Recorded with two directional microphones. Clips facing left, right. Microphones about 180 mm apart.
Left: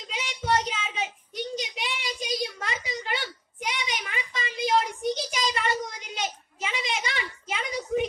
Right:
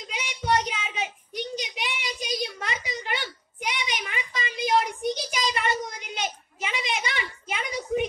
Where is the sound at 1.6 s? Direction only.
20° right (ahead or behind).